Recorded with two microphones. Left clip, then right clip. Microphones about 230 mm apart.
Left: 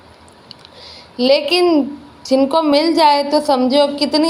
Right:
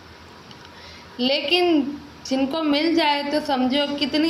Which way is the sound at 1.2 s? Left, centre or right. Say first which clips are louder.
Left 7 dB; left.